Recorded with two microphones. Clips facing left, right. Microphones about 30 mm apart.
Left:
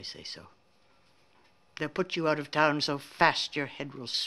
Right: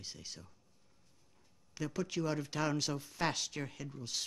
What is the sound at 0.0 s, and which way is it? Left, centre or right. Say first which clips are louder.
Speech: left 6 dB; left.